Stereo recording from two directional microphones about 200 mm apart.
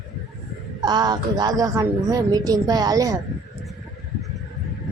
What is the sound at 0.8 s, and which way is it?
Speech, 20° right (ahead or behind).